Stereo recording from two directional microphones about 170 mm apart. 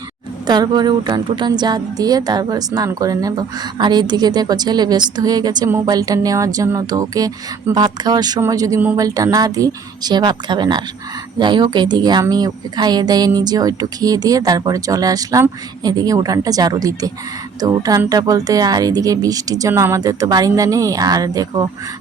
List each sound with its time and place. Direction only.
0.4 s a woman's voice: 25° right (ahead or behind)